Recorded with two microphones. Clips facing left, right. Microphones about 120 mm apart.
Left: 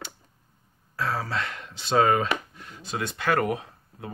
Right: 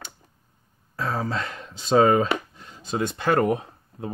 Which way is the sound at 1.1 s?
30° right (ahead or behind).